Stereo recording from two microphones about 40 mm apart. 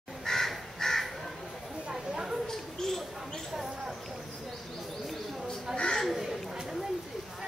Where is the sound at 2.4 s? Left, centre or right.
Centre.